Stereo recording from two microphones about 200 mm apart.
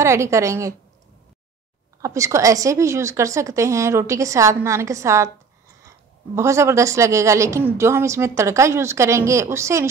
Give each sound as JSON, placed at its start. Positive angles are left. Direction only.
{"t": 0.0, "sound": "a woman's voice", "side_deg": -15}
{"t": 2.0, "sound": "a woman's voice", "side_deg": -15}